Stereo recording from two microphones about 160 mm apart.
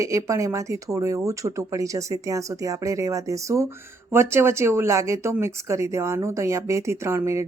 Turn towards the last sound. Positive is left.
turn(degrees=-15)  # may be behind; listen again after turning